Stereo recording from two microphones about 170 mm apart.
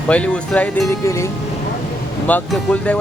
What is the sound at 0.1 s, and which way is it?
Speech, 5° left (ahead or behind).